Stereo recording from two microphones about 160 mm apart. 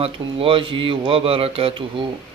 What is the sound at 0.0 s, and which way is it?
A man's voice, 35° right (ahead or behind).